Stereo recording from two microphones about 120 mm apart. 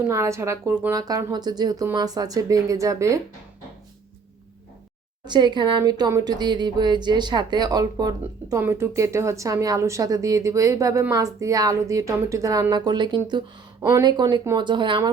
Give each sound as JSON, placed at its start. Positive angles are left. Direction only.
{"t": 0.0, "sound": "speech", "side_deg": -25}
{"t": 0.9, "sound": "speech", "side_deg": -30}
{"t": 5.2, "sound": "speech", "side_deg": -40}